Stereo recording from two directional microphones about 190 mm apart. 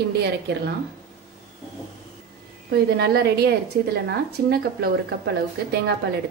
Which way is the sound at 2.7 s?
55° right (ahead or behind).